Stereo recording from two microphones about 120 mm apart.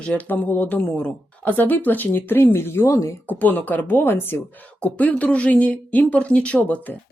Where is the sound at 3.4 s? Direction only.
15° left (ahead or behind).